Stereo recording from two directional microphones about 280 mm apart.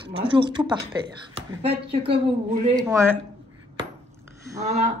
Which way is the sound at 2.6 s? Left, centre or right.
Centre.